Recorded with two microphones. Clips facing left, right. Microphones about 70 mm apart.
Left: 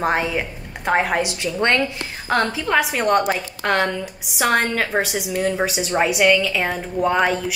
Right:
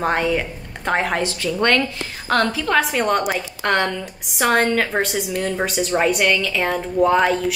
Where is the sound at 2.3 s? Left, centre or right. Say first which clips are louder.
Right 1 dB; centre.